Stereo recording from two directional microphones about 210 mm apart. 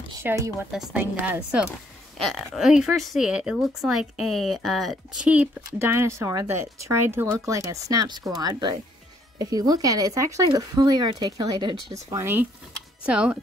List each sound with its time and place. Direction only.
0.2 s speech: 10° right (ahead or behind)